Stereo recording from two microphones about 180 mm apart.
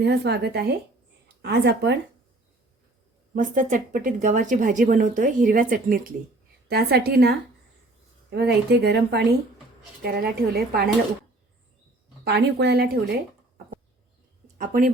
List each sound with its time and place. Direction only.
0.0 s speech: 65° right (ahead or behind)
3.3 s speech: 45° right (ahead or behind)
6.7 s speech: 60° right (ahead or behind)
12.2 s speech: 65° right (ahead or behind)
14.6 s speech: 50° right (ahead or behind)